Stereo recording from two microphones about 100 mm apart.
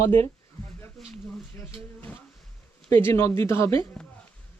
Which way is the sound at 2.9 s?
25° left (ahead or behind).